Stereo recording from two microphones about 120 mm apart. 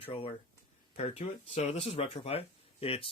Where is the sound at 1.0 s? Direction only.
60° left (ahead or behind).